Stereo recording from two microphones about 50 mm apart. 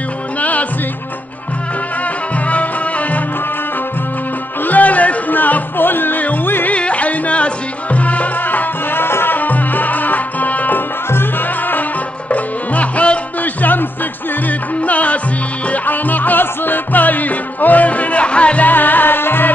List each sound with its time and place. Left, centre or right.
0.4 s music: left
2.4 s music: left
4.6 s music: left
6.7 s music: left
11.1 s music: left
12.3 s music: left
18.7 s music: left